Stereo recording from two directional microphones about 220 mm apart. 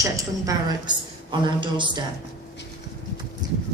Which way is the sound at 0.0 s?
15° right (ahead or behind).